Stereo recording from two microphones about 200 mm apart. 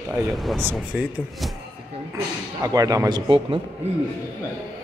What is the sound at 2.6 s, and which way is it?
Speech, 20° right (ahead or behind).